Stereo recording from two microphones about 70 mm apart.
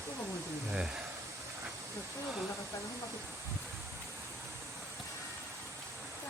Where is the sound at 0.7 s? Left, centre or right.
Centre.